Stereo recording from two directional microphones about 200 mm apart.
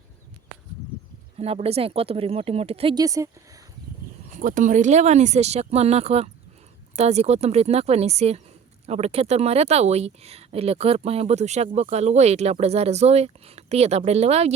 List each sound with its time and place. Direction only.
1.4 s speech: 30° right (ahead or behind)
4.4 s speech: 40° right (ahead or behind)